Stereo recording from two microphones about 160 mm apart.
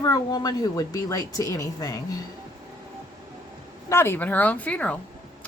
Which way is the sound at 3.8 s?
15° left (ahead or behind).